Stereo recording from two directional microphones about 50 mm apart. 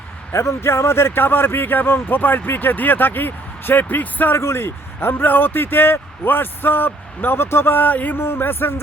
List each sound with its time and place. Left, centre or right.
0.3 s a man's voice: left
4.4 s a man's voice: left